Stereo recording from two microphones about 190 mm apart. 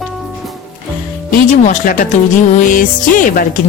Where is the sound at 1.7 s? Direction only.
45° left (ahead or behind).